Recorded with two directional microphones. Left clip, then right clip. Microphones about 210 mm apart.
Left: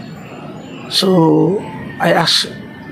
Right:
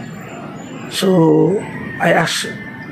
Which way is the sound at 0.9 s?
20° left (ahead or behind).